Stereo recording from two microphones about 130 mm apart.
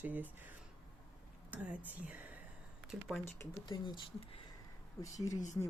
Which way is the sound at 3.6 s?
35° left (ahead or behind).